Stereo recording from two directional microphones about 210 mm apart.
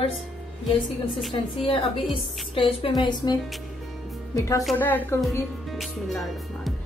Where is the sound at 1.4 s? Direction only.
25° left (ahead or behind).